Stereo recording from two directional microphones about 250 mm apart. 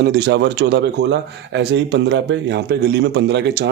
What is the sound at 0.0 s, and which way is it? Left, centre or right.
Speech, right.